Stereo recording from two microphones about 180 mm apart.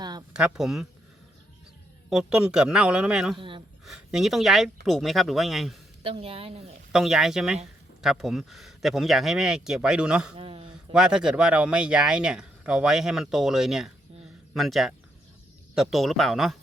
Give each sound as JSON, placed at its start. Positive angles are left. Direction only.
{"t": 0.0, "sound": "a sound", "side_deg": -20}
{"t": 0.3, "sound": "speech", "side_deg": -5}
{"t": 2.0, "sound": "speech", "side_deg": -5}
{"t": 3.3, "sound": "speech", "side_deg": -25}
{"t": 3.8, "sound": "speech", "side_deg": 0}
{"t": 6.0, "sound": "speech", "side_deg": -30}
{"t": 6.9, "sound": "speech", "side_deg": 0}
{"t": 10.3, "sound": "a sound", "side_deg": -30}
{"t": 10.9, "sound": "speech", "side_deg": -5}